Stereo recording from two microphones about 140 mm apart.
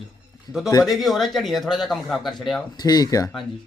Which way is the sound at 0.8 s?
Centre (ahead or behind).